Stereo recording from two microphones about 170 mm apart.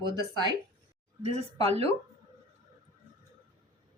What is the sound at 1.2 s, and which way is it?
Speech, 35° right (ahead or behind).